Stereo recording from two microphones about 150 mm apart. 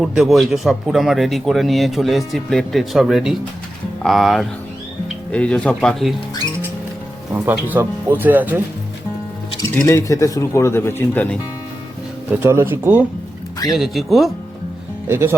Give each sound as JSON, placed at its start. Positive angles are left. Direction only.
{"t": 0.0, "sound": "a man's voice", "side_deg": 0}
{"t": 7.3, "sound": "speech", "side_deg": -10}
{"t": 9.8, "sound": "speech", "side_deg": 20}
{"t": 12.4, "sound": "speech", "side_deg": -15}
{"t": 13.7, "sound": "a man's voice", "side_deg": 0}
{"t": 15.0, "sound": "speech", "side_deg": -15}